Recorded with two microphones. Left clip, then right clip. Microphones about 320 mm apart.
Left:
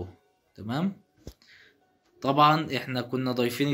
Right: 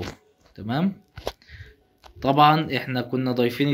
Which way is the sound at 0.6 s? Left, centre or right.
Centre.